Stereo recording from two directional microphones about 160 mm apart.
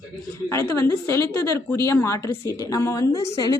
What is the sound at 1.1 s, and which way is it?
A woman's voice, 15° left (ahead or behind).